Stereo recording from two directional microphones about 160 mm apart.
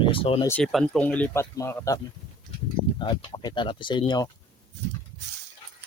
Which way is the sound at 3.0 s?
30° left (ahead or behind).